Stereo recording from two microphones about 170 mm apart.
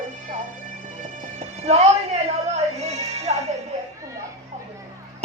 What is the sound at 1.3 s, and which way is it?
Music, 40° right (ahead or behind).